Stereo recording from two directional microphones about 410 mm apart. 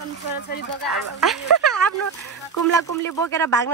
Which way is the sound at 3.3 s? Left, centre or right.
Centre.